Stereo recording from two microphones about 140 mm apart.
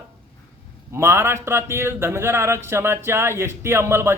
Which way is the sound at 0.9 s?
15° right (ahead or behind).